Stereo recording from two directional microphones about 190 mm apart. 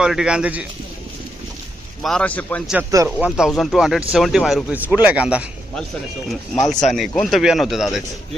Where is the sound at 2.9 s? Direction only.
15° right (ahead or behind).